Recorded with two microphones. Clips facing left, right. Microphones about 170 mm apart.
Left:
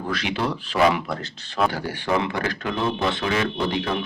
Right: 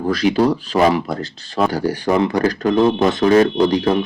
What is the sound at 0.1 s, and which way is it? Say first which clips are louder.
Speech: right 11 dB; 40° right (ahead or behind).